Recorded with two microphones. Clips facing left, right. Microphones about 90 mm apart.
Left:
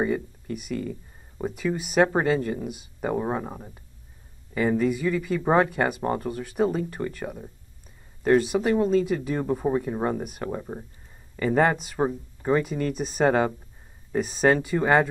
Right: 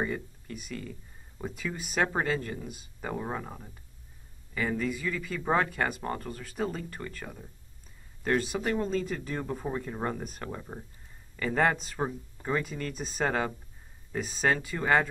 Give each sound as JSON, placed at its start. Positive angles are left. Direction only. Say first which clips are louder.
{"t": 0.0, "sound": "speech", "louder": "left 7 dB", "side_deg": 5}
{"t": 3.1, "sound": "speech", "louder": "left 8 dB", "side_deg": 20}
{"t": 5.7, "sound": "speech", "louder": "left 6 dB", "side_deg": 5}
{"t": 12.0, "sound": "speech", "louder": "left 7 dB", "side_deg": 20}
{"t": 12.6, "sound": "speech", "louder": "left 9 dB", "side_deg": 5}